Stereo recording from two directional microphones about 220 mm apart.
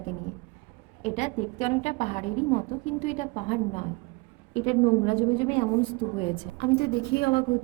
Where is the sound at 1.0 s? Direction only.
30° left (ahead or behind).